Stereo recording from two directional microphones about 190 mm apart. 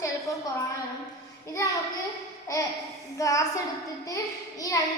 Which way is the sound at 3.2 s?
15° left (ahead or behind).